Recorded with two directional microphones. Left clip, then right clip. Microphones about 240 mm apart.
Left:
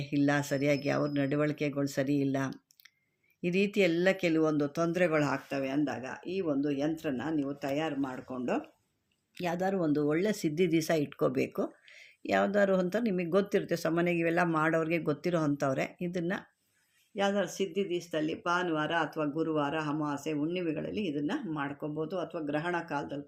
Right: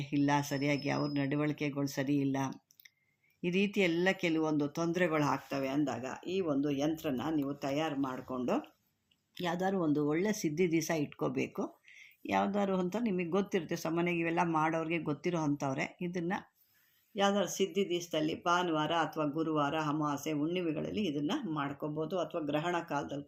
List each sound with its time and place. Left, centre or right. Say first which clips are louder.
0.0 s speech: left 2 dB; centre
17.2 s speech: even; centre